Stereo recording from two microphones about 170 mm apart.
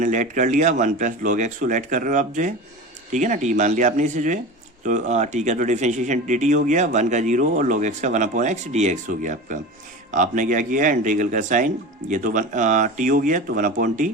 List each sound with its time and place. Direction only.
0.0 s speech: 50° right (ahead or behind)